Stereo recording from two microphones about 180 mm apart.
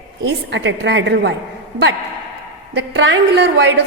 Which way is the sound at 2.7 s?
80° right.